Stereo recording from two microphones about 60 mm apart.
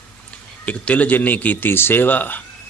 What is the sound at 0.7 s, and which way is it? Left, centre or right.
Speech, left.